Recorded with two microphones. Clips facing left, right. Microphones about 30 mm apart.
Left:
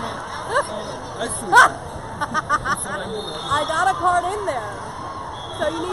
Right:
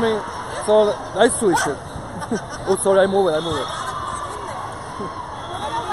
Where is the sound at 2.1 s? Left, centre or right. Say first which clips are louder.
Left 6 dB; left.